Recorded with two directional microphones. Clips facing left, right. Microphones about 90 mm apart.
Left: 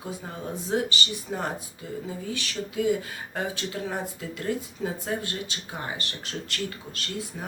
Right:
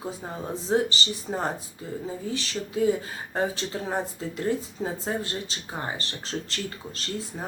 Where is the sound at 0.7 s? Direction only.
30° right (ahead or behind).